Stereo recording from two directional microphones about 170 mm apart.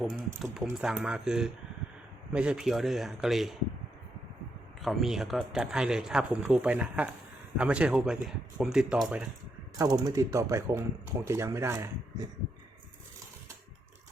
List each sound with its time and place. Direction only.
0.4 s speech: 5° right (ahead or behind)
4.8 s speech: centre (ahead or behind)
9.7 s speech: 20° right (ahead or behind)